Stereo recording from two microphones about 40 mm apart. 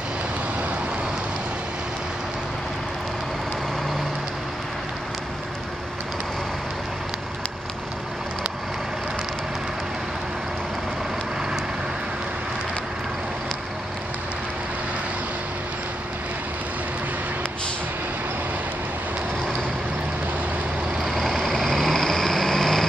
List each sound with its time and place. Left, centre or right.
21.0 s vehicle: centre